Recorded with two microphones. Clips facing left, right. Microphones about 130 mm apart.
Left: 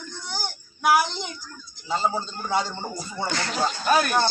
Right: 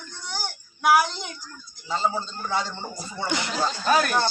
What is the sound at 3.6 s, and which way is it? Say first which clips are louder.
Speech: left 1 dB; 5° left (ahead or behind).